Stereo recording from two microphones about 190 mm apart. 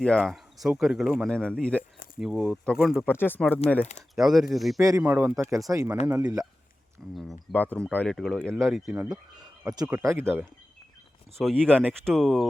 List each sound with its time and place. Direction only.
0.0 s speech: 5° left (ahead or behind)
3.1 s speech: 10° left (ahead or behind)
4.1 s speech: centre (ahead or behind)
4.8 s speech: 15° right (ahead or behind)
7.2 s speech: 5° left (ahead or behind)
9.4 s speech: 20° right (ahead or behind)
11.3 s speech: 5° left (ahead or behind)